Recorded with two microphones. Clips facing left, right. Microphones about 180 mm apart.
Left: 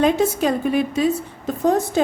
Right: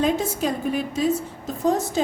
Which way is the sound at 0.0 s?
70° left (ahead or behind).